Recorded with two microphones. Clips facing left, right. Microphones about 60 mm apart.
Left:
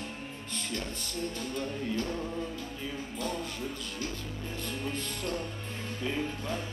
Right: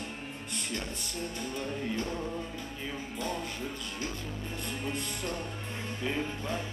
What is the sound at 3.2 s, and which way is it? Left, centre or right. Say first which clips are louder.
Speech: even; centre.